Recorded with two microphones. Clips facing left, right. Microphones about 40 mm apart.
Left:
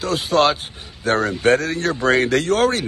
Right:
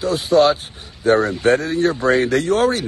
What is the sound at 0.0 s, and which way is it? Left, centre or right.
Speech, left.